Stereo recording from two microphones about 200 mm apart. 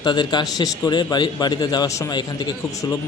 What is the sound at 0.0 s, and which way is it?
A man's voice, 20° left (ahead or behind).